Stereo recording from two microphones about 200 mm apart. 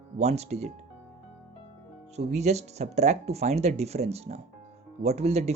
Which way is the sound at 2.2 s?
35° right (ahead or behind).